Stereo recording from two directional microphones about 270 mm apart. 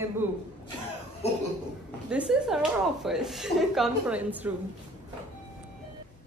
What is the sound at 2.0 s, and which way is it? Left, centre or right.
A woman's voice, centre.